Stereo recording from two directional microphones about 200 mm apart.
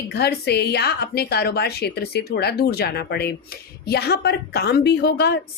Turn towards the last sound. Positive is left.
turn(degrees=55)  # may be behind; listen again after turning